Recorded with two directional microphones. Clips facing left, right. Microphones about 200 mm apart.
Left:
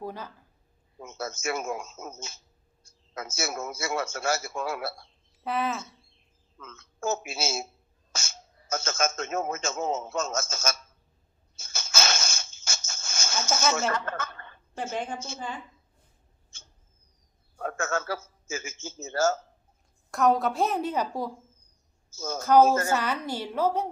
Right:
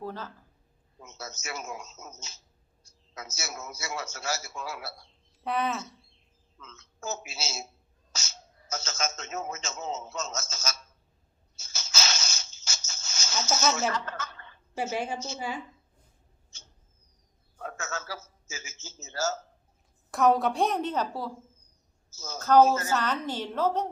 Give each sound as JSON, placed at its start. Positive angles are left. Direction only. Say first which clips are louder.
{"t": 0.0, "sound": "speech", "louder": "even", "side_deg": 15}
{"t": 0.9, "sound": "a man's voice", "louder": "left 7 dB", "side_deg": 55}
{"t": 5.4, "sound": "speech", "louder": "even", "side_deg": 0}
{"t": 6.6, "sound": "a man's voice", "louder": "left 8 dB", "side_deg": 50}
{"t": 11.5, "sound": "a sound", "louder": "left 4 dB", "side_deg": 55}
{"t": 13.7, "sound": "speech", "louder": "left 2 dB", "side_deg": 55}
{"t": 14.9, "sound": "a woman's voice", "louder": "right 1 dB", "side_deg": -10}
{"t": 16.5, "sound": "rodents", "louder": "even", "side_deg": 50}
{"t": 17.6, "sound": "a man's voice", "louder": "left 7 dB", "side_deg": 55}
{"t": 20.1, "sound": "a woman's voice", "louder": "even", "side_deg": 0}
{"t": 22.1, "sound": "speech", "louder": "left 8 dB", "side_deg": 50}
{"t": 22.4, "sound": "a woman's voice", "louder": "left 1 dB", "side_deg": 10}
{"t": 22.6, "sound": "a man's voice", "louder": "left 2 dB", "side_deg": 50}
{"t": 22.9, "sound": "a woman's voice", "louder": "left 1 dB", "side_deg": 10}